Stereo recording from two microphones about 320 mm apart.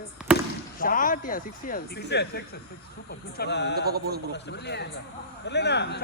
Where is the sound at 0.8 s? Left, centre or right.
Left.